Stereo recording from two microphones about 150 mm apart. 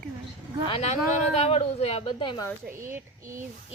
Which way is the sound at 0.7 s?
45° left (ahead or behind).